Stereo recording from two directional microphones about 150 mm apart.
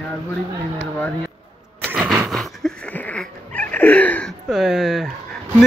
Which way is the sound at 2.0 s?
10° right (ahead or behind).